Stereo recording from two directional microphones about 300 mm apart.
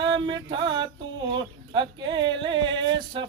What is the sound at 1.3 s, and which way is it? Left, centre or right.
Speech, centre.